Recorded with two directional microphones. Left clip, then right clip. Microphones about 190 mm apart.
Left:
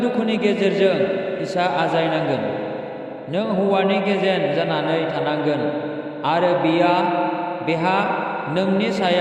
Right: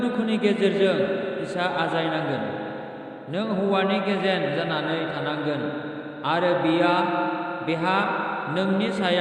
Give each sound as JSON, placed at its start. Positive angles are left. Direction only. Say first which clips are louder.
{"t": 0.0, "sound": "a man's voice", "louder": "left 4 dB", "side_deg": 30}